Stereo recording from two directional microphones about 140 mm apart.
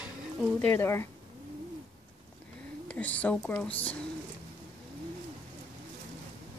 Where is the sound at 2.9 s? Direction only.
10° left (ahead or behind).